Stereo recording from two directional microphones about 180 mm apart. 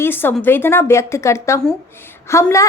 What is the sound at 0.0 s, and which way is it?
A woman's voice, 10° left (ahead or behind).